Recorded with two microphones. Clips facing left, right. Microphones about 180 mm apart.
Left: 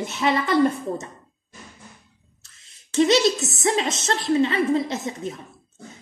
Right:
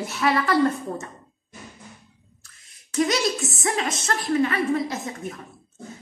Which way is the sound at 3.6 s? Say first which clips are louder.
Left 4 dB; 25° left (ahead or behind).